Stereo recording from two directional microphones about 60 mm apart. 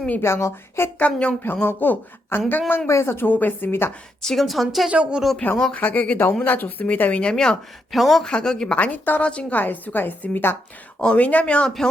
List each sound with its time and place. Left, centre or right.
0.2 s a woman's voice: left
0.9 s speech: left
1.4 s a woman's voice: left
2.8 s a woman's voice: left
3.7 s a woman's voice: left
4.2 s a woman's voice: centre
4.4 s a woman's voice: centre
4.9 s speech: centre
5.7 s speech: left
7.9 s a woman's voice: centre
8.7 s speech: left
9.2 s a woman's voice: centre; by 10.6 s left
11.0 s speech: left